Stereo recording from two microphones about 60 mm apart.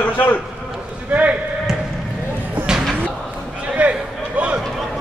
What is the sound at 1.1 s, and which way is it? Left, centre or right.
Basketball bounce, centre.